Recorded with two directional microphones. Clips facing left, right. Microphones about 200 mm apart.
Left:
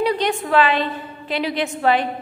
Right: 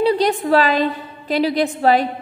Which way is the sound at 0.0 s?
35° right (ahead or behind).